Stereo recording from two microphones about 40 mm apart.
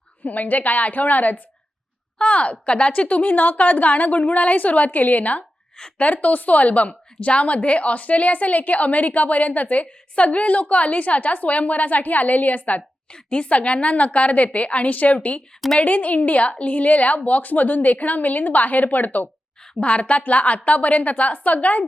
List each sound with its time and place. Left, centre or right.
0.3 s a woman's voice: left
2.1 s a woman's voice: left
5.4 s a sound: centre
6.0 s a woman's voice: left
13.1 s a woman's voice: left
19.8 s a woman's voice: left